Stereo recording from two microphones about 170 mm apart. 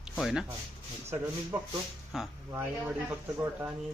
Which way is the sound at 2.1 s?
Centre (ahead or behind).